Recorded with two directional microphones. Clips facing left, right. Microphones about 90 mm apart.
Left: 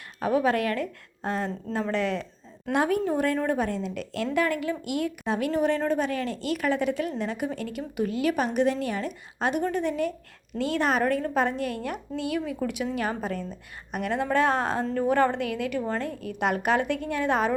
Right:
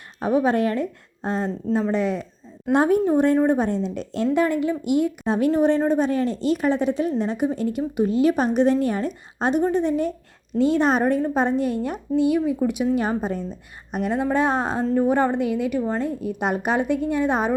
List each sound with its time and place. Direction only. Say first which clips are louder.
0.2 s a woman's voice: right 4 dB; 25° right (ahead or behind)
2.7 s a woman's voice: right 6 dB; 30° right (ahead or behind)